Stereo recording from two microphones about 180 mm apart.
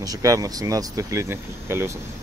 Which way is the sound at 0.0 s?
20° right (ahead or behind).